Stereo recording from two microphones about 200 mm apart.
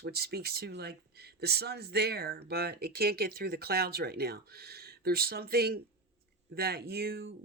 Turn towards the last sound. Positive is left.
turn(degrees=-50)  # may be behind; listen again after turning